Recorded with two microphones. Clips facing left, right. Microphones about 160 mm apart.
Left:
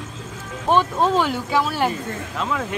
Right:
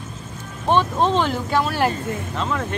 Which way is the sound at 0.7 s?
5° left (ahead or behind).